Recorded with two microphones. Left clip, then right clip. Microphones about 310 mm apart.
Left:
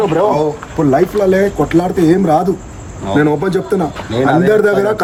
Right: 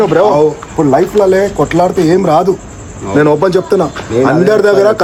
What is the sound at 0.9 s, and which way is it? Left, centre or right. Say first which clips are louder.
A man's voice: right 3 dB; centre.